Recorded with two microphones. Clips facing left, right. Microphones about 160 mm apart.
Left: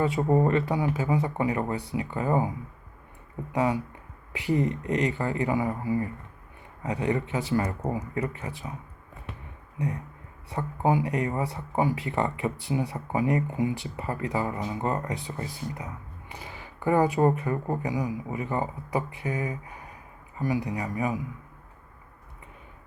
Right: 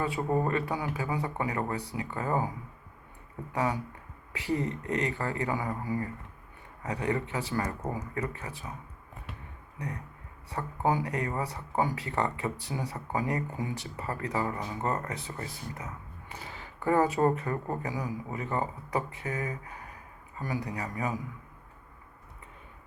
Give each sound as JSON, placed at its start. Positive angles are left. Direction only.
{"t": 0.0, "sound": "speech", "side_deg": 25}
{"t": 3.5, "sound": "speech", "side_deg": 20}
{"t": 10.5, "sound": "speech", "side_deg": 20}